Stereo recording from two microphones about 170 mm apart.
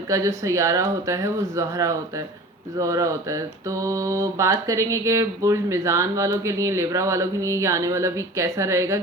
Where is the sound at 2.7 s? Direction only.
20° right (ahead or behind).